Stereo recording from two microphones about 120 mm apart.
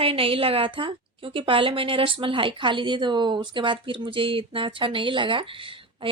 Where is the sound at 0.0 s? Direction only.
50° right (ahead or behind).